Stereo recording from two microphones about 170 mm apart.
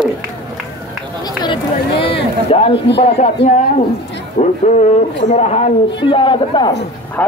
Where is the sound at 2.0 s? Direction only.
35° left (ahead or behind).